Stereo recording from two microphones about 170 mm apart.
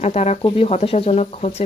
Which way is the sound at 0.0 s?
40° left (ahead or behind).